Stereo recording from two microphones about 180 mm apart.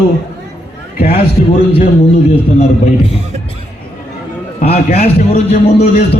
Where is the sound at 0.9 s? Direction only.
55° left (ahead or behind).